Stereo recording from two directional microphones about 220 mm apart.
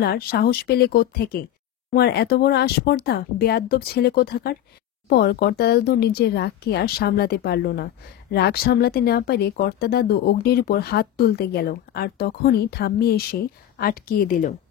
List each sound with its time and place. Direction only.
0.0 s speech: 45° left (ahead or behind)